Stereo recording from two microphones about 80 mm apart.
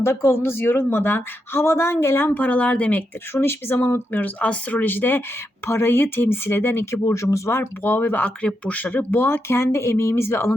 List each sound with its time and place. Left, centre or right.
0.0 s speech: left; by 3.0 s centre
3.3 s speech: left
7.0 s speech: left
8.2 s speech: centre; by 10.5 s left